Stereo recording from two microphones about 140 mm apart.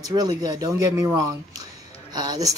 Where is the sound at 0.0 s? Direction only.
30° right (ahead or behind).